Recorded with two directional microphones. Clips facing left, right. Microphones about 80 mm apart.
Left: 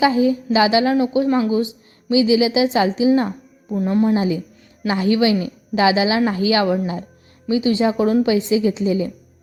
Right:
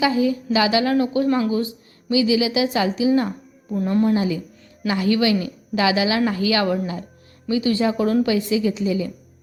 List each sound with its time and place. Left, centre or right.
0.0 s a woman's voice: left
3.8 s speech: centre
4.1 s a woman's voice: left